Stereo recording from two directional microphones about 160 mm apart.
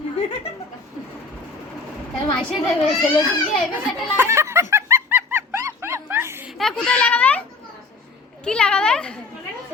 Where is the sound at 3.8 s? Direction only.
15° right (ahead or behind).